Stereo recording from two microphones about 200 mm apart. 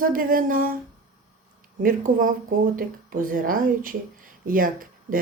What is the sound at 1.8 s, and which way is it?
Speech, 45° right (ahead or behind).